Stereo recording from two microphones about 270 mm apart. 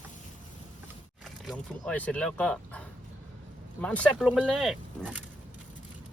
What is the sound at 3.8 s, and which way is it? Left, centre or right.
Speech, centre.